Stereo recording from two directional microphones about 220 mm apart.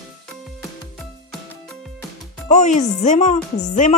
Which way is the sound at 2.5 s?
30° left (ahead or behind).